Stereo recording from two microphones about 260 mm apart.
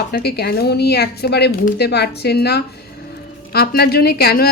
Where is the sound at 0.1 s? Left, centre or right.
Left.